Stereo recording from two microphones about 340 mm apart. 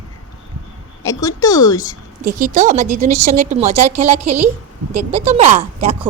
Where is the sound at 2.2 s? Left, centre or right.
Right.